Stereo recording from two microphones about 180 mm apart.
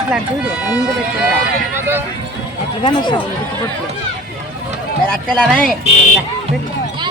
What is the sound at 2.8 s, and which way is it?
Speech, 25° left (ahead or behind).